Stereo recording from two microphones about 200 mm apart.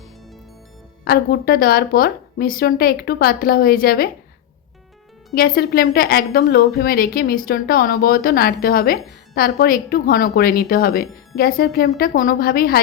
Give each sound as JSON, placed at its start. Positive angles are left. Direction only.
{"t": 1.0, "sound": "a woman's voice", "side_deg": 50}
{"t": 5.3, "sound": "a woman's voice", "side_deg": 50}